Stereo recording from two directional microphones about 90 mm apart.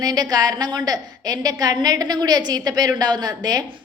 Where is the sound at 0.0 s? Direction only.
45° right (ahead or behind).